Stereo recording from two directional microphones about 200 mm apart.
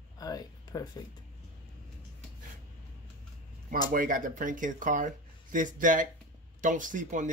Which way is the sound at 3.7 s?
45° right (ahead or behind).